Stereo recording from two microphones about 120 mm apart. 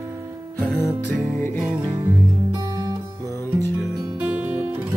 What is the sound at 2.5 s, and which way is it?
Music, 35° right (ahead or behind).